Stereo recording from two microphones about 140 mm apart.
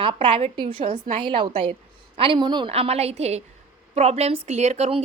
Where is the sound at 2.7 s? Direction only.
45° right (ahead or behind).